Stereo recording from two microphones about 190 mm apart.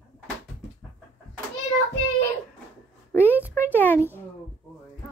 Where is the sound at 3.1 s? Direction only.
10° left (ahead or behind).